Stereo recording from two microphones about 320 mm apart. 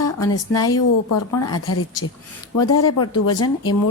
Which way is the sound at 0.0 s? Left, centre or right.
Left.